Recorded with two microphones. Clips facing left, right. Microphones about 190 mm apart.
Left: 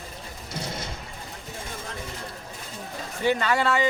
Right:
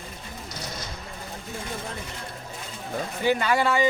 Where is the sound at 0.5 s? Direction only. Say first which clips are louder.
Left 5 dB; 25° left (ahead or behind).